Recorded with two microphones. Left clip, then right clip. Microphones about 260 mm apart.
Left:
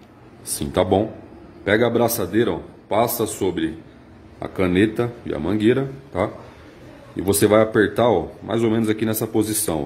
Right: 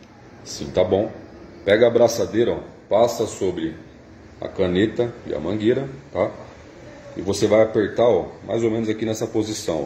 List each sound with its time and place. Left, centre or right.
0.7 s a man's voice: left
7.2 s a man's voice: left